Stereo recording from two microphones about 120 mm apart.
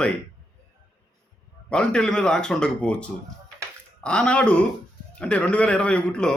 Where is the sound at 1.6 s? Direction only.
5° left (ahead or behind).